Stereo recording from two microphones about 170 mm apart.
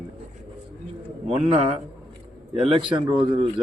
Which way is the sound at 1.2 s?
35° right (ahead or behind).